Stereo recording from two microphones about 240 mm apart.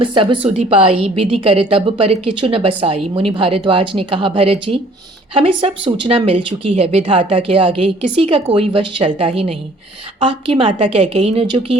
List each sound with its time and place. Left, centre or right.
0.0 s speech: centre